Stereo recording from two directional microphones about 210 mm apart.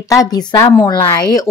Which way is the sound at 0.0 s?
15° left (ahead or behind).